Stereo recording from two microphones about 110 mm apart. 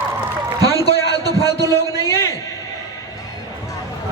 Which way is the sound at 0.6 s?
35° right (ahead or behind).